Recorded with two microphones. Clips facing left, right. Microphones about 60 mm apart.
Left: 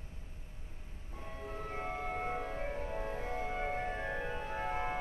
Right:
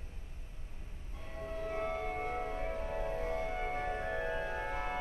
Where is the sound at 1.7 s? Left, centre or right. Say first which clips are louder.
Right 2 dB; left.